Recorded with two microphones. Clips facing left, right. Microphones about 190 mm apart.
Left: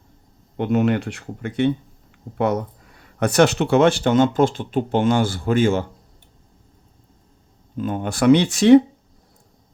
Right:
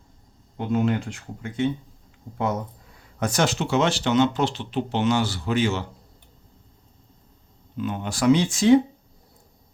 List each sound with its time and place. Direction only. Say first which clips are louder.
0.5 s speech: left 4 dB; 65° left (ahead or behind); by 5.8 s 50° left (ahead or behind)
7.8 s speech: left 4 dB; 50° left (ahead or behind); by 8.8 s 65° left (ahead or behind)